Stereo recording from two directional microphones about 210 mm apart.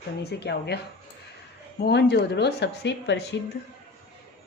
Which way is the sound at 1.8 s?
50° left (ahead or behind).